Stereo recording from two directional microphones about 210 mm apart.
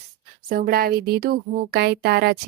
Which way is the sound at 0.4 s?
40° right (ahead or behind).